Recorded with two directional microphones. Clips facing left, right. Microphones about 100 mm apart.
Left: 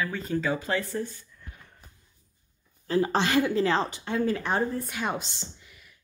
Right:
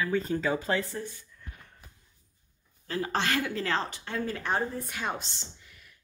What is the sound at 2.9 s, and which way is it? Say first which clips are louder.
A woman's voice: left 5 dB; 25° left (ahead or behind).